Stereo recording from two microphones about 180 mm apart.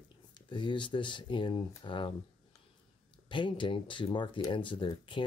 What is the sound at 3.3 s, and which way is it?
Speech, 25° left (ahead or behind).